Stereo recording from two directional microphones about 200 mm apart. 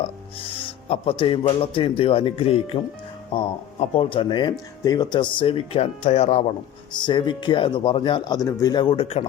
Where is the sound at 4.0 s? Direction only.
25° left (ahead or behind).